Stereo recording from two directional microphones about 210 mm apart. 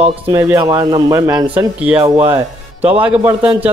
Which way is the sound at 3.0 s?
5° right (ahead or behind).